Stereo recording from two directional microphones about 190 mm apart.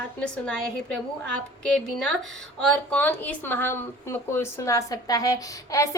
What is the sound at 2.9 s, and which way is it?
A woman's voice, 10° left (ahead or behind).